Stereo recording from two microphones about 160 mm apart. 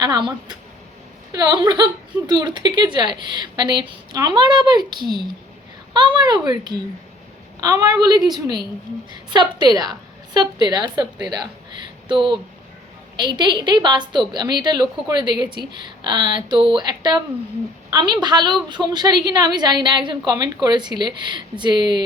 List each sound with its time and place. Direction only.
0.0 s a woman's voice: 25° right (ahead or behind)